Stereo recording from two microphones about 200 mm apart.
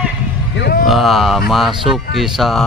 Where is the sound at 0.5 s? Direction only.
55° left (ahead or behind).